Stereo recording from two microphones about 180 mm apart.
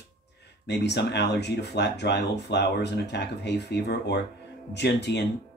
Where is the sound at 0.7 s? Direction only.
70° left (ahead or behind).